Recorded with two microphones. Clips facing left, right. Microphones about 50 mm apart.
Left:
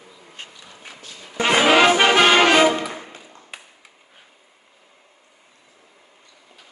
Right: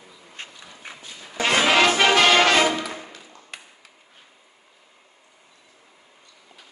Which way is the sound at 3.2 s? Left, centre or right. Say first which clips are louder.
Left 2 dB; centre.